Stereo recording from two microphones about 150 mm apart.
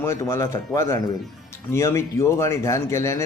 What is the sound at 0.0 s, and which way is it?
Speech, 15° left (ahead or behind).